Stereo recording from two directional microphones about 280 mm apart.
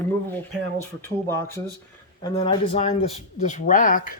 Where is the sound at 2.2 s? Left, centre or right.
Centre.